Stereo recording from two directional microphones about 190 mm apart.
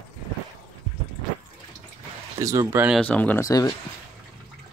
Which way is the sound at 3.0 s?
10° left (ahead or behind).